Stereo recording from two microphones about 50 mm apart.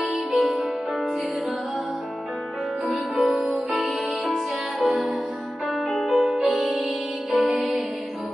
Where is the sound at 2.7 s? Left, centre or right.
Right.